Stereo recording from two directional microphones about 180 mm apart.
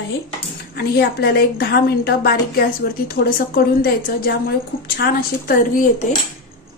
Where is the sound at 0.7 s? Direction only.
60° left (ahead or behind).